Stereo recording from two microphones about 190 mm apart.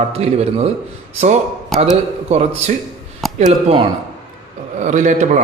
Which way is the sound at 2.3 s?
35° right (ahead or behind).